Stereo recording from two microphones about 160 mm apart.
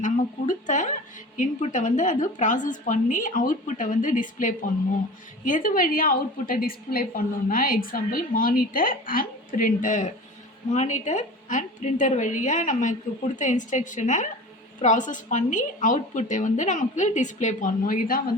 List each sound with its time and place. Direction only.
0.0 s a woman's voice: 50° left (ahead or behind)